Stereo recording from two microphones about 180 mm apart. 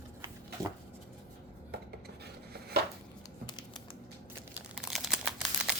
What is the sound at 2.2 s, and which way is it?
Chopping, 60° right (ahead or behind).